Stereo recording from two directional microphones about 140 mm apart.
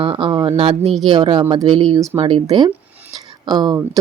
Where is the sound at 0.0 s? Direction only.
35° right (ahead or behind).